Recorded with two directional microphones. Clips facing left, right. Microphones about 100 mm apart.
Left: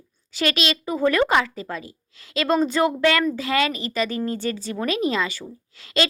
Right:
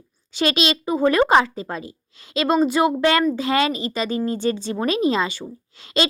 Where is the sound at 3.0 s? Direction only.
30° right (ahead or behind).